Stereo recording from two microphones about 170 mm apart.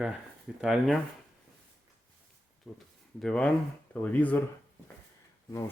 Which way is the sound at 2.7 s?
Centre (ahead or behind).